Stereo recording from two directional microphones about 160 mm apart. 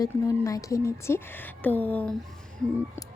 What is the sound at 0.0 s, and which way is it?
Speech, 20° left (ahead or behind).